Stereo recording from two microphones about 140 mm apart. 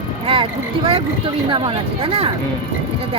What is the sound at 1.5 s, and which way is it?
Speech, 35° right (ahead or behind).